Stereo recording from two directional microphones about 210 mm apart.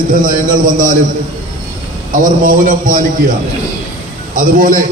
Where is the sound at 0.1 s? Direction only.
40° right (ahead or behind).